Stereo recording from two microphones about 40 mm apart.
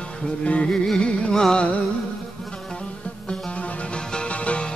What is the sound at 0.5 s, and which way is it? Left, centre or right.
Music, left.